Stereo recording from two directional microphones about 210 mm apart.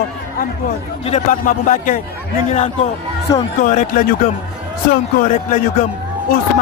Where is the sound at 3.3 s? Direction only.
15° left (ahead or behind).